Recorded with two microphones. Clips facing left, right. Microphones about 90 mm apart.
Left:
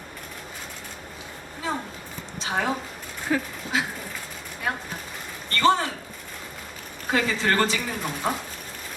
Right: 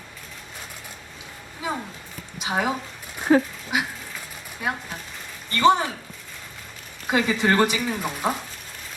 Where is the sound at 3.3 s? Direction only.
35° right (ahead or behind).